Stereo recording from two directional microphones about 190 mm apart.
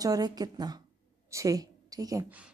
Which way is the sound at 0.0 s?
20° right (ahead or behind).